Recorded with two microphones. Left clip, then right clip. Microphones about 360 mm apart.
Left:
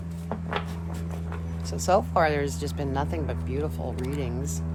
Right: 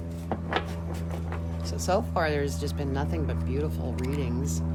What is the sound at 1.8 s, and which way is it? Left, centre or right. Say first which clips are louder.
Speech: left 4 dB; centre.